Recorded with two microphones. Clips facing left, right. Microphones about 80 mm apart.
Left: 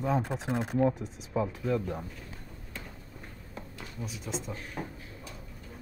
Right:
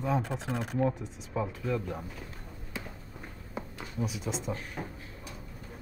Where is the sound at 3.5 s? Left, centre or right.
Right.